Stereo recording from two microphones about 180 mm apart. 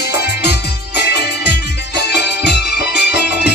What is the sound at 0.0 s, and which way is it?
Music, 65° left (ahead or behind).